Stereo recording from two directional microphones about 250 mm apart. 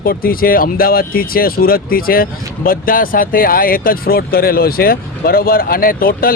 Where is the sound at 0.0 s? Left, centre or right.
Left.